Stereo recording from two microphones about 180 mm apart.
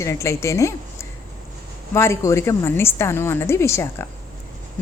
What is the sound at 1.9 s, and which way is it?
A woman's voice, 15° left (ahead or behind).